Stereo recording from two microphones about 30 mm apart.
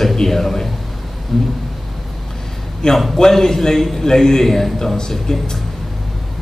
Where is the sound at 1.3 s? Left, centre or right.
Centre.